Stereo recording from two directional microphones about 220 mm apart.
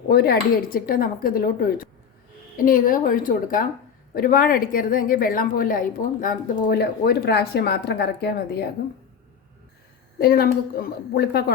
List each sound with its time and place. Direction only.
0.1 s a woman's voice: 45° left (ahead or behind)
10.2 s a woman's voice: 45° left (ahead or behind)